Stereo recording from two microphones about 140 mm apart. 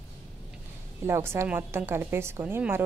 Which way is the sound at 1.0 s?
20° right (ahead or behind).